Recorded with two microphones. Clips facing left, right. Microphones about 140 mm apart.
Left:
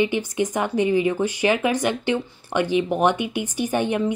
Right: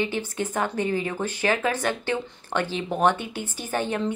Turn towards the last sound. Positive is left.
turn(degrees=15)  # may be behind; listen again after turning